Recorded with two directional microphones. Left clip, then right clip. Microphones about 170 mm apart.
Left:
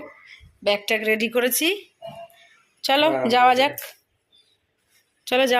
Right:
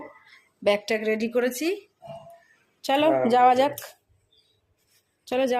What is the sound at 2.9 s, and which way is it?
A woman's voice, 15° right (ahead or behind).